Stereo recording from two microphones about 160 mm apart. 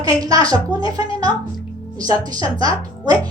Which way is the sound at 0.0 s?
25° right (ahead or behind).